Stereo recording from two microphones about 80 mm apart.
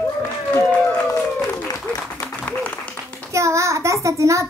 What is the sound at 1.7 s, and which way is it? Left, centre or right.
Applause, centre.